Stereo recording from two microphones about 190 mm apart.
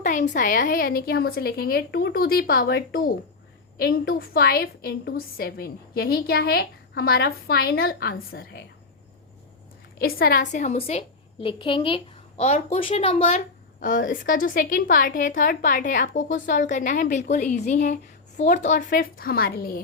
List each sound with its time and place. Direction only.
0.0 s a woman's voice: 40° left (ahead or behind)
10.0 s a woman's voice: 50° left (ahead or behind); by 13.4 s 30° left (ahead or behind)
13.7 s a woman's voice: 45° left (ahead or behind)